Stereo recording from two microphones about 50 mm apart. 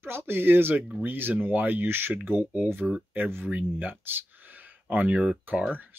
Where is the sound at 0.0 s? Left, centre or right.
Right.